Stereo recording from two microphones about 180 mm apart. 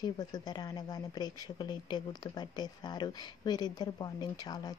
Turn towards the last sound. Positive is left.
turn(degrees=25)  # may be behind; listen again after turning